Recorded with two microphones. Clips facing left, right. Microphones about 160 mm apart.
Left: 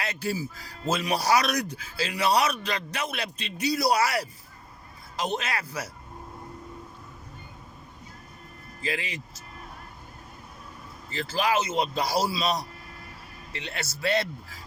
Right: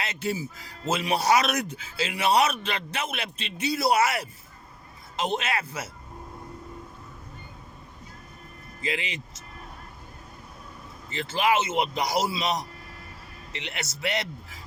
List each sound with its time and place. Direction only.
0.0 s a man's voice: 25° right (ahead or behind)
8.8 s a man's voice: 25° right (ahead or behind)
11.1 s a man's voice: 25° right (ahead or behind)